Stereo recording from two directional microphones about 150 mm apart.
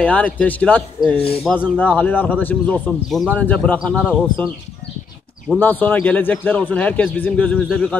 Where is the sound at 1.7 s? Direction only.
10° left (ahead or behind).